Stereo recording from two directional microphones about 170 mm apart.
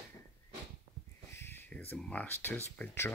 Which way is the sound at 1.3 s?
15° left (ahead or behind).